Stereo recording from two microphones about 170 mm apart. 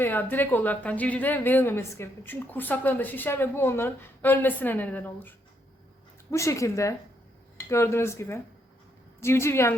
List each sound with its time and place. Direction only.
0.0 s a woman's voice: 10° left (ahead or behind)
6.3 s a woman's voice: 15° left (ahead or behind)